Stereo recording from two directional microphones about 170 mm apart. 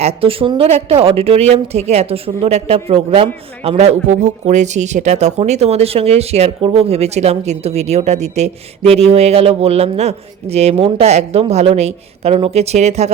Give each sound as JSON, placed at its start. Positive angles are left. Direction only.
{"t": 0.0, "sound": "speech", "side_deg": -35}